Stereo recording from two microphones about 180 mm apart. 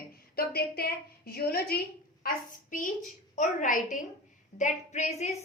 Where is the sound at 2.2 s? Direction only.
50° left (ahead or behind).